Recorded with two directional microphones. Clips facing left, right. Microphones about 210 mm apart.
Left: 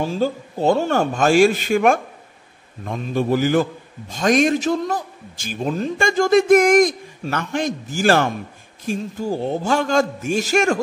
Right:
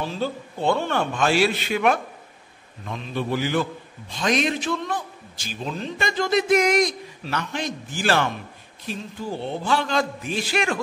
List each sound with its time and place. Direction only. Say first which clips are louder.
0.0 s a man's voice: left 6 dB; 45° left (ahead or behind)